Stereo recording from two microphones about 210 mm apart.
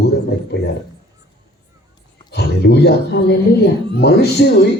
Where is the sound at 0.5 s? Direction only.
50° left (ahead or behind).